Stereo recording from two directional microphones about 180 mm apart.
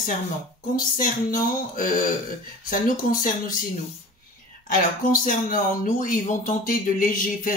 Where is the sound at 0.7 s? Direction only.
50° left (ahead or behind).